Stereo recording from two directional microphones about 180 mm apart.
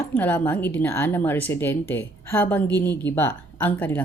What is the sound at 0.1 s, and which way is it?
Speech, 10° left (ahead or behind).